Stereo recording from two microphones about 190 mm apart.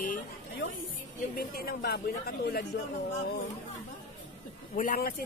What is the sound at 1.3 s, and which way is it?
Speech, 50° left (ahead or behind).